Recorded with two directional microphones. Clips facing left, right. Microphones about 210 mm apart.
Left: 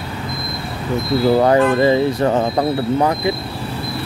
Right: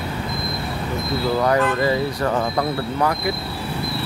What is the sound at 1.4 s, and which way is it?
Speech, 25° left (ahead or behind).